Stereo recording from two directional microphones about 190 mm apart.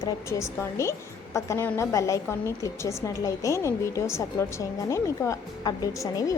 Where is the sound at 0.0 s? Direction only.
15° left (ahead or behind).